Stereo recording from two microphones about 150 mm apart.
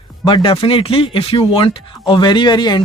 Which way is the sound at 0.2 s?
35° left (ahead or behind).